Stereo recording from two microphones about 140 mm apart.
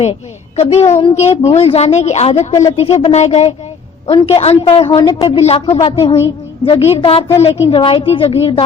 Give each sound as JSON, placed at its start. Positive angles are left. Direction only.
{"t": 0.0, "sound": "a woman's voice", "side_deg": 50}